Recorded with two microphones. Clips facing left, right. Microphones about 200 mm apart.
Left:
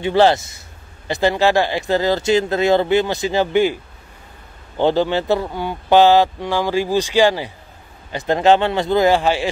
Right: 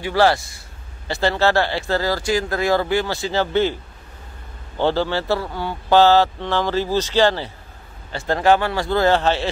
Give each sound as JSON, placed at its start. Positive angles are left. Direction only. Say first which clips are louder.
{"t": 0.0, "sound": "a man's voice", "louder": "left 3 dB", "side_deg": 20}
{"t": 4.7, "sound": "speech", "louder": "left 3 dB", "side_deg": 15}